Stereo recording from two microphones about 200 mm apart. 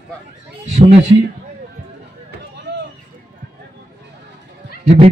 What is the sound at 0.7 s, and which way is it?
Speech, 35° right (ahead or behind).